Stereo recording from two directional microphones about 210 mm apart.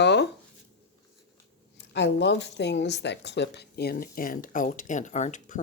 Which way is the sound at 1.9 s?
55° left (ahead or behind).